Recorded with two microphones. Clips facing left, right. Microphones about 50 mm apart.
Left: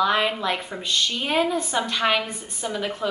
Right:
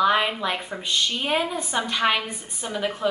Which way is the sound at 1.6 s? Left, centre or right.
Right.